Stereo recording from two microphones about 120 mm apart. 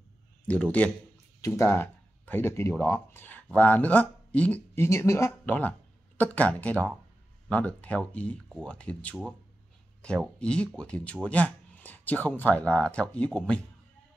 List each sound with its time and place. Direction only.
0.5 s speech: 10° left (ahead or behind)
1.4 s speech: 20° left (ahead or behind)
4.8 s speech: 25° left (ahead or behind)
5.4 s speech: 15° left (ahead or behind)